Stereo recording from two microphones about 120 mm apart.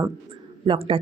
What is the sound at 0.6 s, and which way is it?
Speech, 55° right (ahead or behind).